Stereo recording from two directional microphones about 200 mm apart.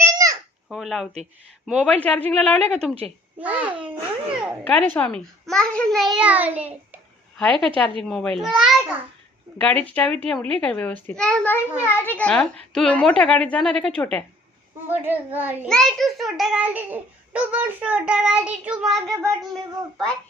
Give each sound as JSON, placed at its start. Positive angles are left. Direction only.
{"t": 0.0, "sound": "babbling", "side_deg": -15}
{"t": 0.7, "sound": "a child's voice", "side_deg": 0}
{"t": 3.3, "sound": "a child's voice", "side_deg": -5}
{"t": 4.6, "sound": "a child's voice", "side_deg": 5}
{"t": 7.3, "sound": "a child's voice", "side_deg": 5}
{"t": 9.6, "sound": "a child's voice", "side_deg": 5}
{"t": 14.8, "sound": "a child's voice", "side_deg": -10}
{"t": 15.7, "sound": "a child's voice", "side_deg": 0}